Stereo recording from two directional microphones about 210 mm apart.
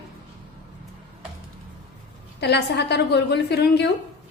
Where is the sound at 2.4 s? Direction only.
55° left (ahead or behind).